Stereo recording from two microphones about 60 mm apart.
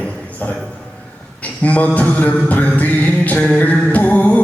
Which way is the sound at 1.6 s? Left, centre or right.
Left.